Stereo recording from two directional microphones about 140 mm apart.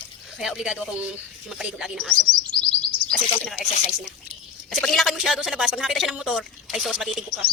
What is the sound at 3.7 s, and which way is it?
Speech, 55° left (ahead or behind).